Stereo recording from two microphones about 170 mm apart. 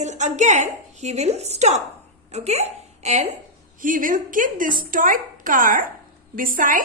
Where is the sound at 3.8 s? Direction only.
55° right (ahead or behind).